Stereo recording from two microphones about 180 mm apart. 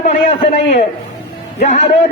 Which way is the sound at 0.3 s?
35° left (ahead or behind).